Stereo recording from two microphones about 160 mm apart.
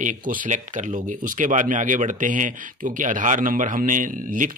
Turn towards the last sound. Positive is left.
turn(degrees=-55)  # may be behind; listen again after turning